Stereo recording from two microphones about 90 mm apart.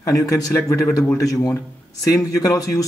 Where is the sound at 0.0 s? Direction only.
40° left (ahead or behind).